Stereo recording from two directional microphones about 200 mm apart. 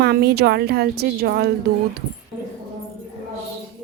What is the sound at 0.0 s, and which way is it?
A woman's voice, 55° right (ahead or behind).